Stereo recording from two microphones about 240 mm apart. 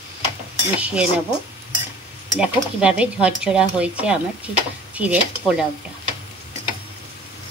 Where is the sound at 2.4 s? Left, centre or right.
Centre.